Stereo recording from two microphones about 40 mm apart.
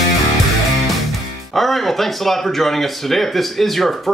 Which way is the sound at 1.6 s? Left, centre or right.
Centre.